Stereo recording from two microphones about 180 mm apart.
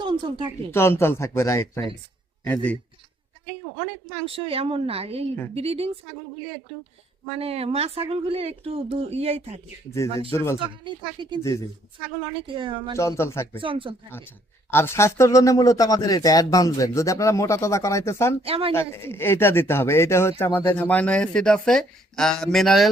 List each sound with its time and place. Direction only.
0.0 s speech: 25° right (ahead or behind)
0.7 s a man's voice: 15° left (ahead or behind)
4.3 s speech: 30° right (ahead or behind)
7.3 s speech: 35° right (ahead or behind)
10.3 s speech: 15° left (ahead or behind)
10.8 s speech: 25° right (ahead or behind)
12.5 s speech: 30° right (ahead or behind)
13.0 s speech: 15° left (ahead or behind)
13.6 s speech: 30° right (ahead or behind)
14.7 s speech: 15° left (ahead or behind)
18.4 s speech: 30° right (ahead or behind)
18.7 s speech: 15° left (ahead or behind)
22.5 s music: centre (ahead or behind)